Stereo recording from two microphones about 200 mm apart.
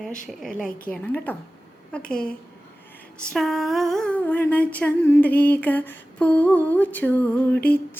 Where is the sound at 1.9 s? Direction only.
5° left (ahead or behind).